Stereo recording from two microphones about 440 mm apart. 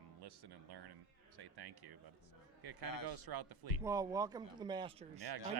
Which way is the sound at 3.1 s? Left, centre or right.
Right.